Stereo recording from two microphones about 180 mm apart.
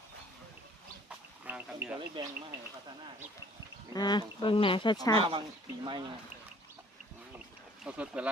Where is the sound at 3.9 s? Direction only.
25° left (ahead or behind).